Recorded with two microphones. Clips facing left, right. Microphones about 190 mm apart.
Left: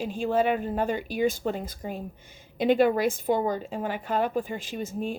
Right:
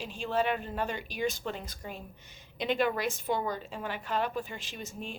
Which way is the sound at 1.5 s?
45° left (ahead or behind).